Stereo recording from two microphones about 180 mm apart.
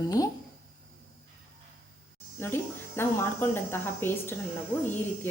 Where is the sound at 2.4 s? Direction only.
15° left (ahead or behind).